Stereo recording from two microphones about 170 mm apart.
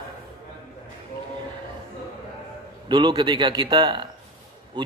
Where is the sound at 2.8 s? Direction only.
25° right (ahead or behind).